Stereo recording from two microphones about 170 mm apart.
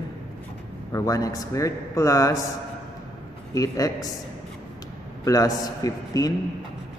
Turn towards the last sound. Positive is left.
turn(degrees=20)  # may be behind; listen again after turning